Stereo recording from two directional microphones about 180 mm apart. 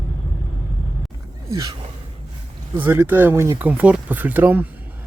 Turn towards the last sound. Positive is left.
turn(degrees=-10)  # may be behind; listen again after turning